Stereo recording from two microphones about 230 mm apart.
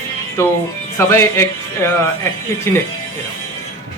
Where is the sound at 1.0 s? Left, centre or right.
Centre.